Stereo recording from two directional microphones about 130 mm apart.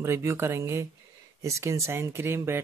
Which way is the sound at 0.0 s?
20° right (ahead or behind).